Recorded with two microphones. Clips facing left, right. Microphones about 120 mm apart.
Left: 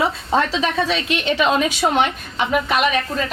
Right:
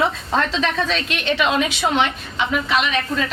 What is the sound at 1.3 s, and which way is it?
Speech, 40° left (ahead or behind).